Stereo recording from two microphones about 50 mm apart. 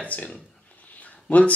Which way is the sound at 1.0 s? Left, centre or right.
Left.